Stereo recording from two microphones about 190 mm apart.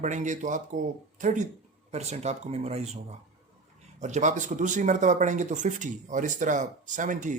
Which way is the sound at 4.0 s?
40° right (ahead or behind).